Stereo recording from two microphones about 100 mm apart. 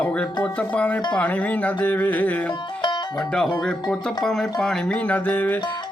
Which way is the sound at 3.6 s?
5° left (ahead or behind).